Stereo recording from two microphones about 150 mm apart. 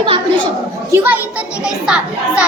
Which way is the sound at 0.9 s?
15° right (ahead or behind).